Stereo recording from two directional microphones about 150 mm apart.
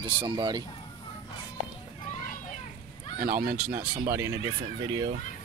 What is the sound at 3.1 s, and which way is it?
Speech, 80° right.